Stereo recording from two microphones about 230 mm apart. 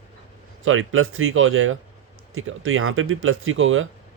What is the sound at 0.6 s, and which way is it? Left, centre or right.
Speech, right.